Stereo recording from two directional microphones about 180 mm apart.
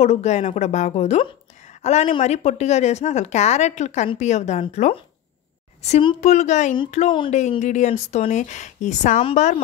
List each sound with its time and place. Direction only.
0.0 s a woman's voice: 40° left (ahead or behind)